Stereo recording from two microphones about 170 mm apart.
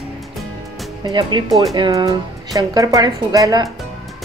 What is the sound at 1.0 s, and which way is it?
Speech, 25° right (ahead or behind).